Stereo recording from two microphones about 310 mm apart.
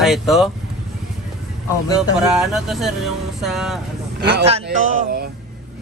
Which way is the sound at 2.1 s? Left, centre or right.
Centre.